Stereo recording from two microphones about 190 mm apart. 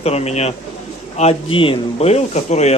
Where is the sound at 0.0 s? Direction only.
35° left (ahead or behind).